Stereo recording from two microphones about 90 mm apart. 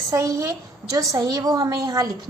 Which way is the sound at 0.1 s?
35° right (ahead or behind).